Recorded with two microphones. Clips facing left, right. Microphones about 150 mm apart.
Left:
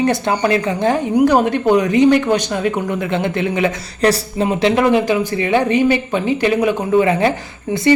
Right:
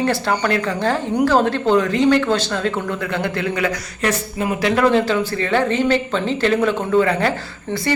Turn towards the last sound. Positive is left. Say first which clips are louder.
# left 3 dB
turn(degrees=15)  # may be behind; listen again after turning